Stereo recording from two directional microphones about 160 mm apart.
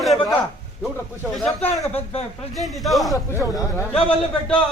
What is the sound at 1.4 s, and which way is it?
Speech, 15° left (ahead or behind).